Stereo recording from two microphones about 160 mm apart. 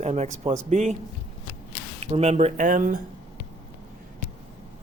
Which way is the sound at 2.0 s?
40° right (ahead or behind).